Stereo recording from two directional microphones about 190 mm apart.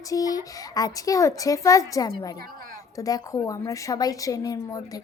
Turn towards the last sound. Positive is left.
turn(degrees=20)  # may be behind; listen again after turning